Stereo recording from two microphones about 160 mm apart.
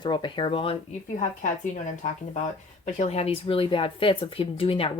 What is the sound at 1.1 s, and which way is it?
Speech, 50° left (ahead or behind).